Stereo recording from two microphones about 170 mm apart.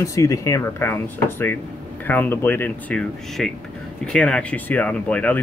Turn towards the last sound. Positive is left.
turn(degrees=10)  # may be behind; listen again after turning